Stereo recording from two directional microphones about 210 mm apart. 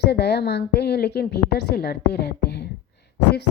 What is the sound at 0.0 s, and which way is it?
Speech, 50° left (ahead or behind).